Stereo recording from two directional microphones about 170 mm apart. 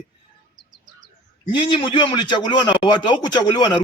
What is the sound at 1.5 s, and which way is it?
A man's voice, 30° left (ahead or behind).